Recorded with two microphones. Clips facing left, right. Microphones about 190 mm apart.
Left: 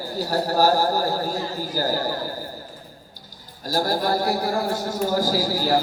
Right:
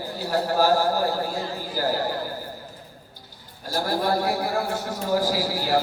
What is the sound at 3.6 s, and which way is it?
Speech, 40° left (ahead or behind).